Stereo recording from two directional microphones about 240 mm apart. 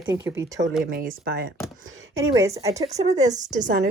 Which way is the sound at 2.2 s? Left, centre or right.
Centre.